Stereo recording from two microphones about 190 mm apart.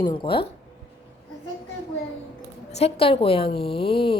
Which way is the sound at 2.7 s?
35° left (ahead or behind).